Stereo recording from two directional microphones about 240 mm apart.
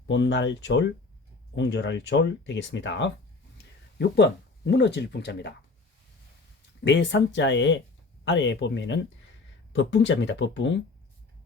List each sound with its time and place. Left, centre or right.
0.1 s speech: left
6.8 s speech: left